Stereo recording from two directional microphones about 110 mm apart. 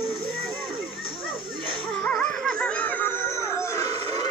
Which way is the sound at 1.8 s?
5° left (ahead or behind).